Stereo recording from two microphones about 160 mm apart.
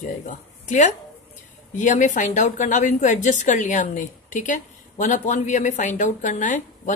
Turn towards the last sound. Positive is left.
turn(degrees=50)  # may be behind; listen again after turning